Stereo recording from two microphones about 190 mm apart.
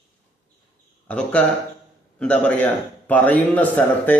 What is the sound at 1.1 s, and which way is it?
A man's voice, 5° left (ahead or behind).